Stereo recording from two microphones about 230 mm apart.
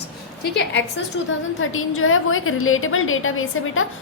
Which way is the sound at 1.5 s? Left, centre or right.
Left.